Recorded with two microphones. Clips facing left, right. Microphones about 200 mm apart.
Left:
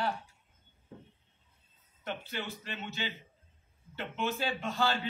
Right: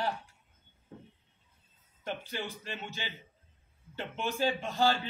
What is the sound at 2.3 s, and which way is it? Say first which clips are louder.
Speech: right 1 dB; 15° right (ahead or behind).